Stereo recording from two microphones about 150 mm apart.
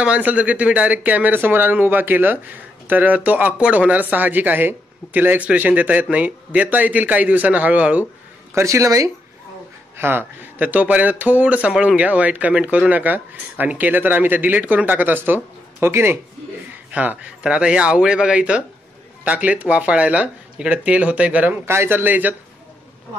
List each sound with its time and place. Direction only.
0.0 s speech: 10° right (ahead or behind)
8.5 s speech: 20° right (ahead or behind)